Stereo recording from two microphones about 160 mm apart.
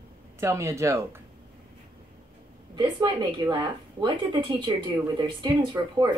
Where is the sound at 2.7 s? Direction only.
30° right (ahead or behind).